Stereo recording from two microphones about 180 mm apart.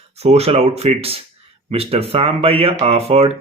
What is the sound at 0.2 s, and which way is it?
Speech, 35° right (ahead or behind).